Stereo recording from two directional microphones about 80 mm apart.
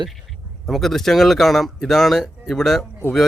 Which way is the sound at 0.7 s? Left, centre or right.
Centre.